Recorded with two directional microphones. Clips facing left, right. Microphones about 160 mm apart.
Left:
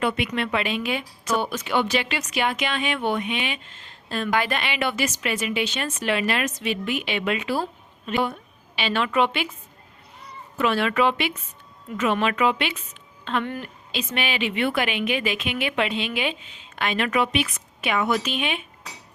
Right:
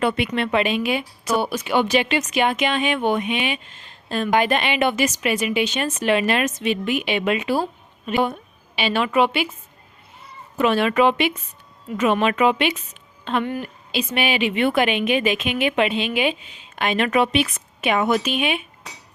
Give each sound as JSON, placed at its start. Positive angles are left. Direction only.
{"t": 0.0, "sound": "speech", "side_deg": -35}
{"t": 10.2, "sound": "a woman's voice", "side_deg": -20}